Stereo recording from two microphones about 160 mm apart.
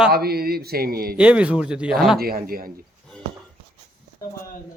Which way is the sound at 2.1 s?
70° right (ahead or behind).